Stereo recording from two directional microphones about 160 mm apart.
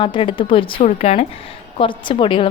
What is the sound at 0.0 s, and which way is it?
Speech, 30° left (ahead or behind).